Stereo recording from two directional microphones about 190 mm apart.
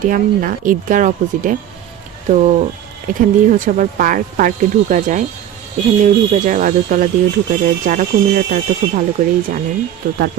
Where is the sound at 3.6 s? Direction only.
45° right (ahead or behind).